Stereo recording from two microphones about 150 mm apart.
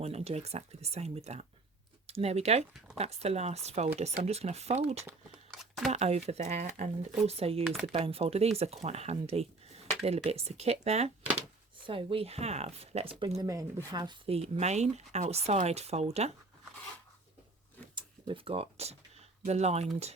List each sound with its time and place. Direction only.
0.0 s speech: 45° right (ahead or behind)
5.3 s crumpling: centre (ahead or behind)
5.9 s speech: 45° right (ahead or behind)
7.6 s speech: 5° right (ahead or behind)
7.9 s speech: 40° right (ahead or behind)
13.3 s speech: 25° right (ahead or behind)
14.3 s speech: 45° right (ahead or behind)
17.9 s speech: 35° right (ahead or behind)